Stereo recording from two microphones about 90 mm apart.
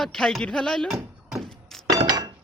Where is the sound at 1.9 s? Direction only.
50° right (ahead or behind).